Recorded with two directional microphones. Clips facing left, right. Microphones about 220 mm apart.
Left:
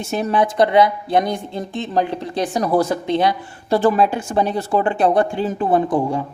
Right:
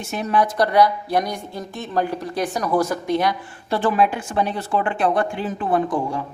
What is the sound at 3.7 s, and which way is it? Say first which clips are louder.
A woman's voice: left 4 dB; 40° left (ahead or behind).